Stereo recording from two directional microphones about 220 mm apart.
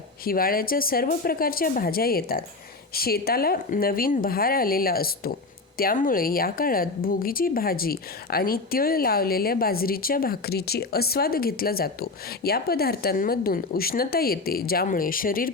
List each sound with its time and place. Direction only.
0.3 s speech: 40° left (ahead or behind)